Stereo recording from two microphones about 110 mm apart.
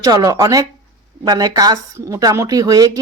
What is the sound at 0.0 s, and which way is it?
Speech, 35° right (ahead or behind).